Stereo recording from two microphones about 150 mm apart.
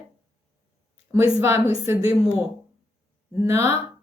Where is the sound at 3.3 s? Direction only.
15° right (ahead or behind).